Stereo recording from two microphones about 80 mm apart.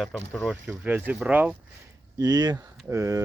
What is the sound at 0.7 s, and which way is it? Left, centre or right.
Speech, right.